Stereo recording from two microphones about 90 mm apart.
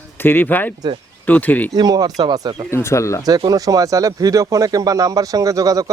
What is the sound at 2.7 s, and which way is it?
Speech, 30° left (ahead or behind).